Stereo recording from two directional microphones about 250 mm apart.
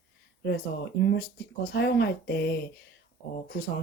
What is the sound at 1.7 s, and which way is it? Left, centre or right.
Speech, left.